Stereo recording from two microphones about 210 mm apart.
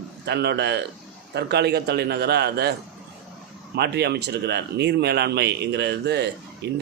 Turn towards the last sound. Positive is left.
turn(degrees=-50)  # may be behind; listen again after turning